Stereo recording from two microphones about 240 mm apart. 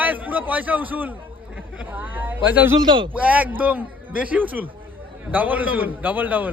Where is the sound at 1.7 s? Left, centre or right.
Centre.